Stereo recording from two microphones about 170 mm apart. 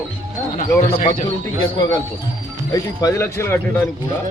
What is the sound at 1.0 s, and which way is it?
Speech, 40° left (ahead or behind).